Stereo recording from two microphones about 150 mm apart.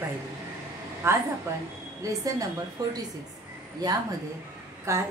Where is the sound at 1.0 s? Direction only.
15° right (ahead or behind).